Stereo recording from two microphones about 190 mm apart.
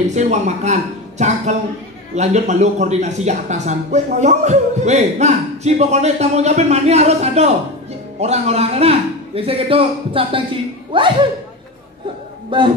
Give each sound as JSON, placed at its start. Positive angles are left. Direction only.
{"t": 0.1, "sound": "speech", "side_deg": -35}
{"t": 12.4, "sound": "a man's voice", "side_deg": -25}